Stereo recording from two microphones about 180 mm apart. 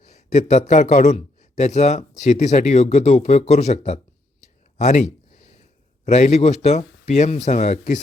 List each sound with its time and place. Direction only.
0.0 s a man's voice: 40° left (ahead or behind)
4.8 s a sound: 40° left (ahead or behind)
6.1 s speech: 40° left (ahead or behind)